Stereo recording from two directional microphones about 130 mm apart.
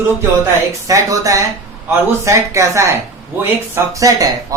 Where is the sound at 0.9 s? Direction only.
25° right (ahead or behind).